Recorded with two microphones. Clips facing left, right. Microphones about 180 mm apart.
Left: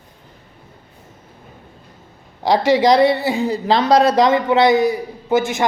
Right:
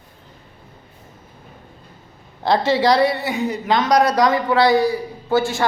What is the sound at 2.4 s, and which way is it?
A woman's voice, 15° left (ahead or behind).